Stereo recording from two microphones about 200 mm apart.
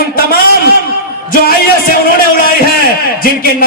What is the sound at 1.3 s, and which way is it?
Speech, 50° left (ahead or behind).